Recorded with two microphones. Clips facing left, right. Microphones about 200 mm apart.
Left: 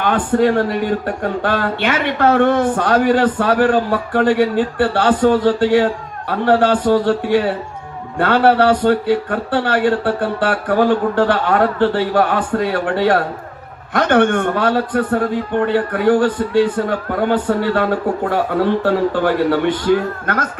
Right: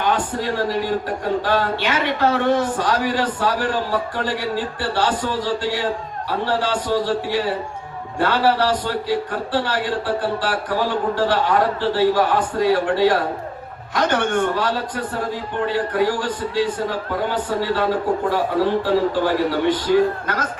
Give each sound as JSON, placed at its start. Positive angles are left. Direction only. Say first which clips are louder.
{"t": 0.0, "sound": "speech", "louder": "left 7 dB", "side_deg": 55}